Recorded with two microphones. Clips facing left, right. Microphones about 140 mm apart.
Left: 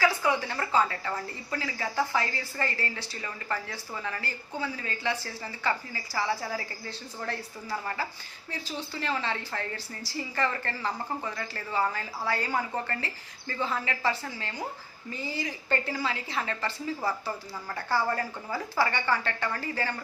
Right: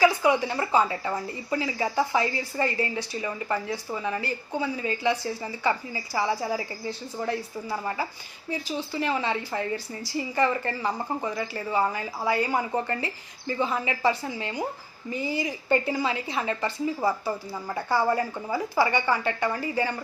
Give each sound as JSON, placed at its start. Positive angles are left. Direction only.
{"t": 0.0, "sound": "a woman's voice", "side_deg": -15}